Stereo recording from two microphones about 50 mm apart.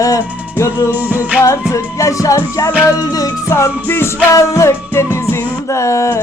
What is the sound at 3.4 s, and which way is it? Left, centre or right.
Music, left.